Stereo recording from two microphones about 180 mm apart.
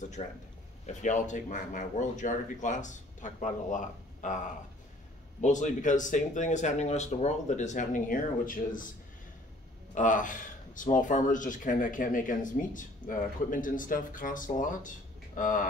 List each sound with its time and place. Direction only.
0.2 s speech: 35° left (ahead or behind)
5.4 s speech: 45° left (ahead or behind)
9.9 s speech: 45° left (ahead or behind)